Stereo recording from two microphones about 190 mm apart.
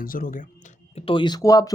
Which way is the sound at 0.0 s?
50° left (ahead or behind).